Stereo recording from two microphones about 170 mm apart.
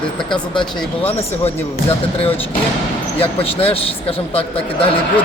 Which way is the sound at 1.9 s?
35° left (ahead or behind).